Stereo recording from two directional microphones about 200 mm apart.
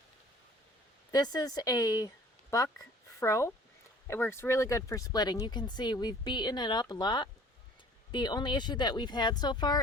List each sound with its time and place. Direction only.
1.1 s speech: 20° left (ahead or behind)